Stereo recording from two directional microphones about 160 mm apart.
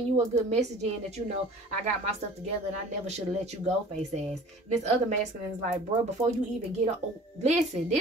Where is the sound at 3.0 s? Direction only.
45° right (ahead or behind).